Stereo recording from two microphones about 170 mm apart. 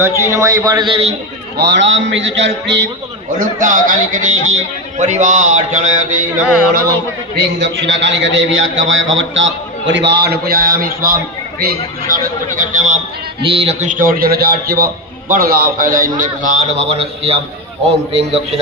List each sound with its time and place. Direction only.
0.0 s a man's voice: 15° right (ahead or behind); by 1.1 s 30° right (ahead or behind)
1.5 s a man's voice: 90° right
3.3 s a man's voice: 50° right (ahead or behind)
7.3 s a man's voice: 90° right; by 13.0 s 45° right (ahead or behind)
13.4 s a man's voice: 35° right (ahead or behind)
16.9 s a man's voice: 35° right (ahead or behind)